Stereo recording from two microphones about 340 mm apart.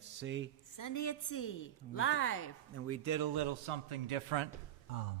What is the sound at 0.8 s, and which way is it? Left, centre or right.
A woman's voice, left.